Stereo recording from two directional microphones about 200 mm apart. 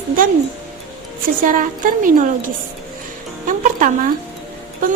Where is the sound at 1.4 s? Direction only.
45° right (ahead or behind).